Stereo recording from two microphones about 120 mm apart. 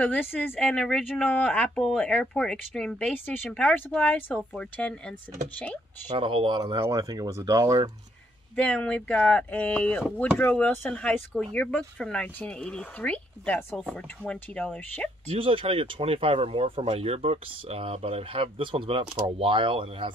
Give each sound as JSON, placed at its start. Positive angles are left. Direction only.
{"t": 0.0, "sound": "speech", "side_deg": 15}
{"t": 6.1, "sound": "speech", "side_deg": -45}
{"t": 6.8, "sound": "speech", "side_deg": -30}
{"t": 8.5, "sound": "speech", "side_deg": 10}
{"t": 15.3, "sound": "speech", "side_deg": -50}
{"t": 16.8, "sound": "speech", "side_deg": -60}